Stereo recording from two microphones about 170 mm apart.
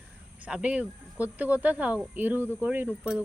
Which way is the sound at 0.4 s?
5° right (ahead or behind).